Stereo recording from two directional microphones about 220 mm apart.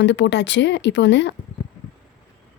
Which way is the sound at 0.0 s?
55° left (ahead or behind).